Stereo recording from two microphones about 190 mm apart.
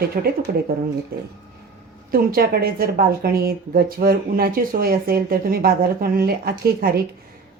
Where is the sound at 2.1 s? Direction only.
55° right (ahead or behind).